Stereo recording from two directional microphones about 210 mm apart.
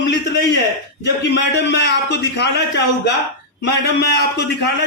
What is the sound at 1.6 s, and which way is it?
Speech, 55° left (ahead or behind).